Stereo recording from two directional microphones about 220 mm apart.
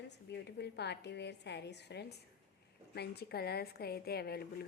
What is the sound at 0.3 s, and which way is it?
A woman's voice, 50° left (ahead or behind).